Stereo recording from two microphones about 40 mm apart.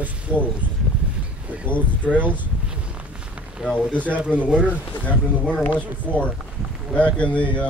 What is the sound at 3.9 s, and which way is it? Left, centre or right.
Speech, right.